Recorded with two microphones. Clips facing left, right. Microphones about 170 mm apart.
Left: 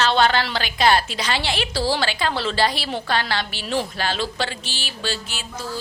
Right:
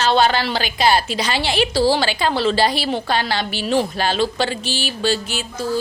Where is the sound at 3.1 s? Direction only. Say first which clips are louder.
Right 3 dB; 15° right (ahead or behind).